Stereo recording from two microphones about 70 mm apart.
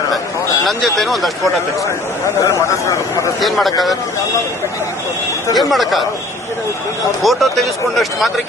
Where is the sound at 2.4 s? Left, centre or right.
Left.